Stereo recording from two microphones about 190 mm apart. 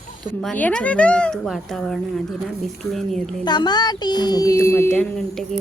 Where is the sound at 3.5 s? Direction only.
20° left (ahead or behind).